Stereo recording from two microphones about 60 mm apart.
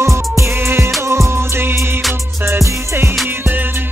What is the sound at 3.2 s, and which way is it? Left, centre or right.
Music, right.